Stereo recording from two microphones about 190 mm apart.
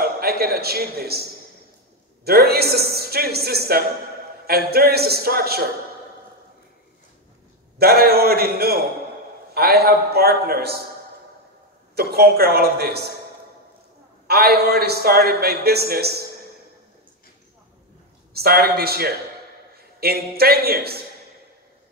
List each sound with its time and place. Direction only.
0.0 s a man's voice: 55° right (ahead or behind)
2.2 s a man's voice: 55° right (ahead or behind)
7.8 s a man's voice: 55° right (ahead or behind)
11.9 s a man's voice: 55° right (ahead or behind)
14.2 s a man's voice: 55° right (ahead or behind)
18.4 s a man's voice: 55° right (ahead or behind)